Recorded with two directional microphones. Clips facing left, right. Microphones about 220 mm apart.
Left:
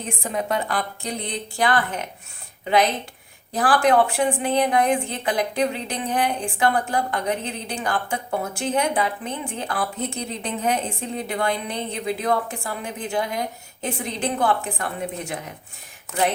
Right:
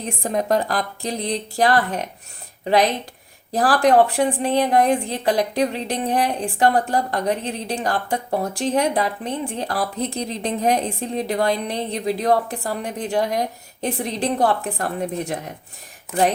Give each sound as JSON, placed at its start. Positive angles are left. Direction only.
{"t": 0.2, "sound": "a woman's voice", "side_deg": -40}
{"t": 3.5, "sound": "a woman's voice", "side_deg": -40}